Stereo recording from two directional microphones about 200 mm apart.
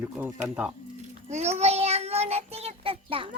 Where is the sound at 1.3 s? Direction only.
35° right (ahead or behind).